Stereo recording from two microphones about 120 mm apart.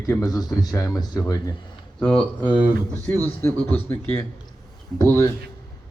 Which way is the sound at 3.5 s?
10° left (ahead or behind).